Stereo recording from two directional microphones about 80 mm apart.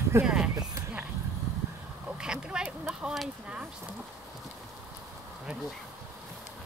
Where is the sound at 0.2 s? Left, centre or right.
Centre.